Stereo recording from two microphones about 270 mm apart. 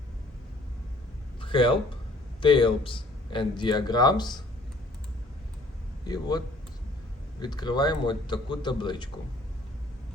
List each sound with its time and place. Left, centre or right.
1.4 s a sound: centre
2.4 s speech: centre
6.1 s speech: centre